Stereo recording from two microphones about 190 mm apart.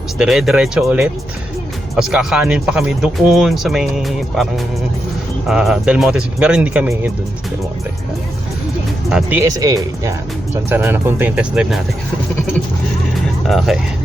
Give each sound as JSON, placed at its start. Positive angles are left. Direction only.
{"t": 0.2, "sound": "speech", "side_deg": 0}
{"t": 9.0, "sound": "speech", "side_deg": -5}
{"t": 9.4, "sound": "speech", "side_deg": -20}
{"t": 13.5, "sound": "speech", "side_deg": 0}